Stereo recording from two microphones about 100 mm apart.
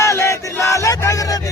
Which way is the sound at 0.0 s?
30° left (ahead or behind).